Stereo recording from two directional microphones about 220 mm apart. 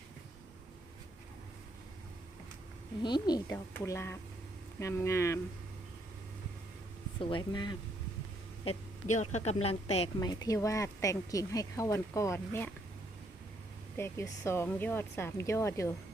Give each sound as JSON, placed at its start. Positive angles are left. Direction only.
{"t": 3.0, "sound": "a woman's voice", "side_deg": 20}
{"t": 7.2, "sound": "a woman's voice", "side_deg": 20}
{"t": 8.6, "sound": "a woman's voice", "side_deg": 30}
{"t": 10.2, "sound": "a woman's voice", "side_deg": 15}
{"t": 13.9, "sound": "a woman's voice", "side_deg": 10}